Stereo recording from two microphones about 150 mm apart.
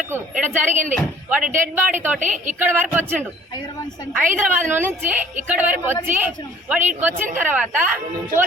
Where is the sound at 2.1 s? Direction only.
55° right (ahead or behind).